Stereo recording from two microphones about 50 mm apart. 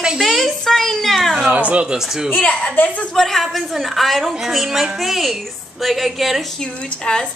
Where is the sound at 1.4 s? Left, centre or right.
Right.